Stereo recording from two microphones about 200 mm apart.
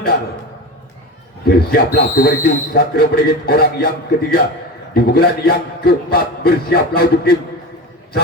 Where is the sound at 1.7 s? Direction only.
50° left (ahead or behind).